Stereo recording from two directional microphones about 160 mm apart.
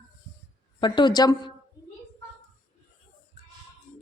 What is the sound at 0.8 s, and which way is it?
Speech, 30° left (ahead or behind).